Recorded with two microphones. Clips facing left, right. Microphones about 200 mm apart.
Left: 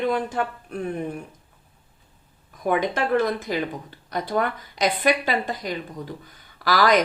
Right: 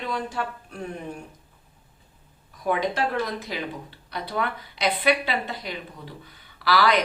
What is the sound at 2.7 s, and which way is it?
A woman's voice, 50° left (ahead or behind).